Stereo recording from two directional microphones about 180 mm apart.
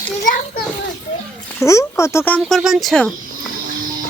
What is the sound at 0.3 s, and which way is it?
Speech, 55° left (ahead or behind).